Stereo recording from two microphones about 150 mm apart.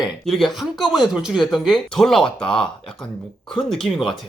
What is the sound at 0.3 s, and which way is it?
Speech, centre (ahead or behind).